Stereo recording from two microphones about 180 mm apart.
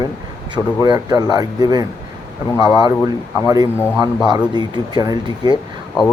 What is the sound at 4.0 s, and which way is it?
Speech, 25° right (ahead or behind).